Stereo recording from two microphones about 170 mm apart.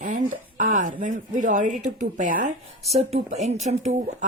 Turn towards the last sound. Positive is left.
turn(degrees=-45)  # may be behind; listen again after turning